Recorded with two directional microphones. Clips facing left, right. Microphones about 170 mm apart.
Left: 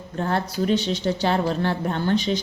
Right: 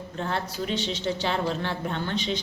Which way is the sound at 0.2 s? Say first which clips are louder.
Left 6 dB; 45° left (ahead or behind).